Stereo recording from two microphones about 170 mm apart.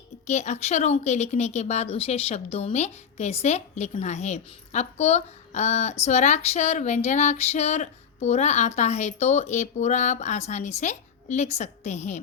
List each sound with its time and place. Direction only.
0.3 s speech: 45° left (ahead or behind)